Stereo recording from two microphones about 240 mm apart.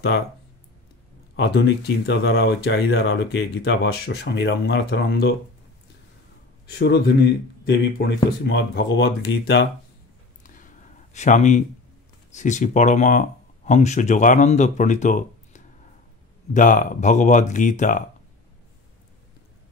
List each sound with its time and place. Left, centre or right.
1.3 s speech: left
6.8 s speech: left
10.4 s a sound: left
12.4 s speech: left